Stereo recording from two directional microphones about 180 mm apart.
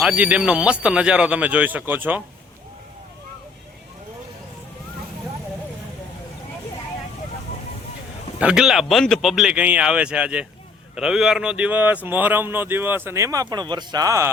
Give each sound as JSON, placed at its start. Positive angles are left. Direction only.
{"t": 0.0, "sound": "speech", "side_deg": -5}
{"t": 8.4, "sound": "a man's voice", "side_deg": -5}